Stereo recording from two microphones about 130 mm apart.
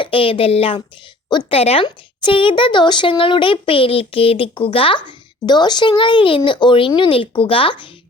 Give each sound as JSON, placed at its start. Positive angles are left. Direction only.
{"t": 0.0, "sound": "speech", "side_deg": 45}